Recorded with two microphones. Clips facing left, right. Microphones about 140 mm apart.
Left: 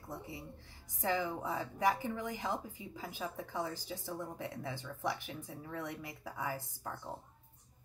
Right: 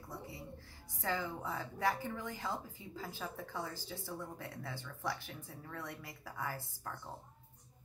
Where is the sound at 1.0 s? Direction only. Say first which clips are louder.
Left 4 dB; 15° left (ahead or behind).